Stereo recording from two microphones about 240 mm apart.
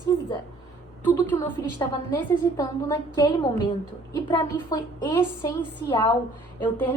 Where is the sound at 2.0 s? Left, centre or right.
Centre.